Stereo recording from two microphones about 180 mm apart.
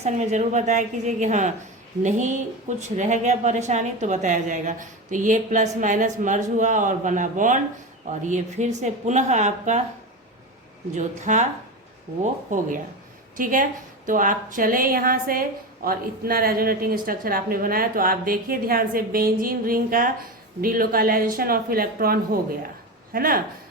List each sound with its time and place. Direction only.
0.0 s a woman's voice: 40° right (ahead or behind)
10.9 s a woman's voice: 40° right (ahead or behind)